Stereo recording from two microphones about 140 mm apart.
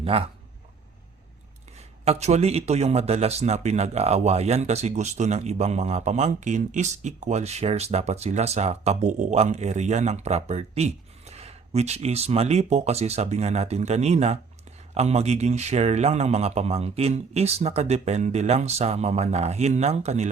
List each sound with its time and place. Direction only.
0.0 s speech: 45° right (ahead or behind)
2.0 s speech: 55° right (ahead or behind)